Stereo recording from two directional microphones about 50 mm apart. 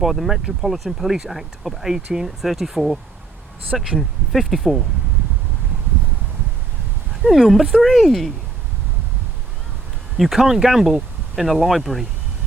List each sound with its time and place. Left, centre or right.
0.0 s speech: centre
7.3 s speech: centre
10.2 s speech: centre